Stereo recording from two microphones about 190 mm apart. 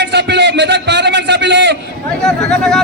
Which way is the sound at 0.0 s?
65° right (ahead or behind).